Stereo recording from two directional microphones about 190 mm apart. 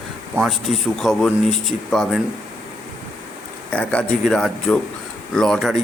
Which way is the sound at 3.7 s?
5° left (ahead or behind).